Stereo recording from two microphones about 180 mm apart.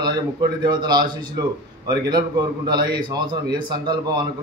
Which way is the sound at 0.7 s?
25° right (ahead or behind).